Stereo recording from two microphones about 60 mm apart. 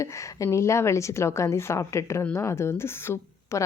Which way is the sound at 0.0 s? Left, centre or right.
Left.